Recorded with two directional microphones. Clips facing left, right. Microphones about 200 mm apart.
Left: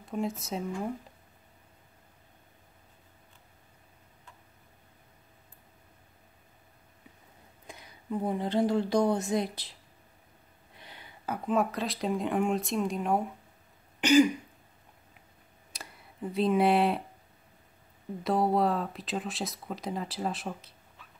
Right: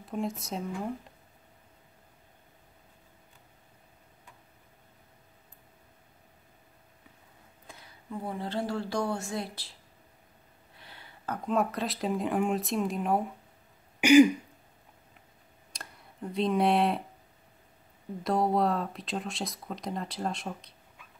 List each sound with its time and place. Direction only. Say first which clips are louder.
0.0 s speech: left 1 dB; centre (ahead or behind)
7.6 s speech: left 5 dB; 15° left (ahead or behind)
10.8 s speech: left 2 dB; 15° left (ahead or behind); by 13.3 s centre (ahead or behind)
14.0 s throat clearing: right 4 dB; 10° right (ahead or behind)
15.7 s tick: even; 5° left (ahead or behind)
18.2 s speech: even; centre (ahead or behind)